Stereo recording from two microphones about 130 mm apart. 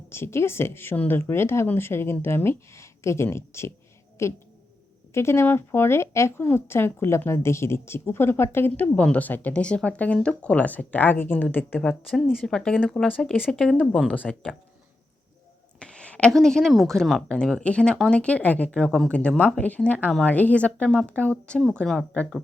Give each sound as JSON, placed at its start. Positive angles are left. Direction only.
{"t": 0.1, "sound": "a woman's voice", "side_deg": 20}
{"t": 11.8, "sound": "speech", "side_deg": 5}
{"t": 15.8, "sound": "speech", "side_deg": 5}